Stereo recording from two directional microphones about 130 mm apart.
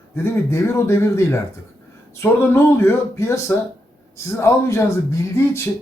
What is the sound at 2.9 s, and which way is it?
Speech, 20° left (ahead or behind).